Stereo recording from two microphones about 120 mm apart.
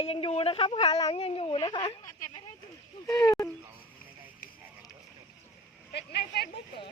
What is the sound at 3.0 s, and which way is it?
Speech, 25° left (ahead or behind).